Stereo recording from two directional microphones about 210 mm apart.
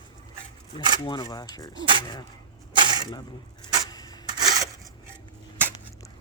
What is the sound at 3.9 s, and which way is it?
Rub, 20° left (ahead or behind).